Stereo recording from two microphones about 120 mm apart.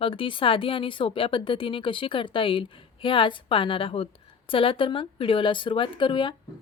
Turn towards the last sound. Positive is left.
turn(degrees=45)  # may be behind; listen again after turning